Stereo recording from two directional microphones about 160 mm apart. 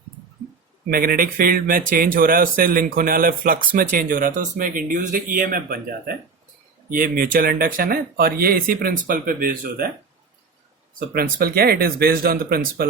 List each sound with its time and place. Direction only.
0.9 s speech: 65° right (ahead or behind)
11.1 s speech: 70° right (ahead or behind)